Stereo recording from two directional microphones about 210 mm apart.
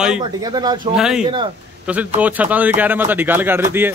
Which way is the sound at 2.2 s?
5° right (ahead or behind).